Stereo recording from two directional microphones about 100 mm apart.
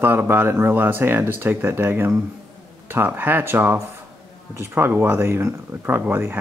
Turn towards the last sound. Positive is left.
turn(degrees=-25)  # may be behind; listen again after turning